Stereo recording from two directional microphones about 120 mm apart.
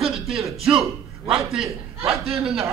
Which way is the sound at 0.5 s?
50° right (ahead or behind).